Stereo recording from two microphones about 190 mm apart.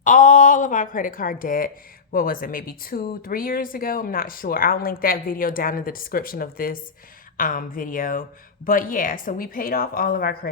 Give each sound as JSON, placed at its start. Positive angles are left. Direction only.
{"t": 0.0, "sound": "speech", "side_deg": 40}